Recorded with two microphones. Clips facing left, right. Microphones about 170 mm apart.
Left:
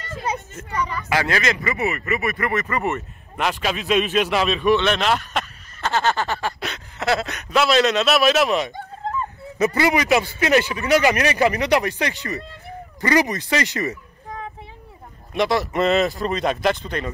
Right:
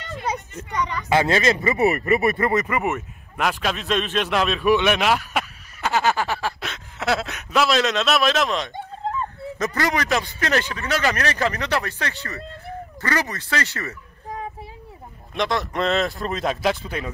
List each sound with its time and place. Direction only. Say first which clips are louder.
1.0 s speech: right 4 dB; 25° right (ahead or behind)
2.8 s a man's voice: even; centre (ahead or behind)
4.7 s a man's voice: even; 10° right (ahead or behind); by 13.9 s 15° left (ahead or behind)
15.3 s a man's voice: left 4 dB; 5° left (ahead or behind)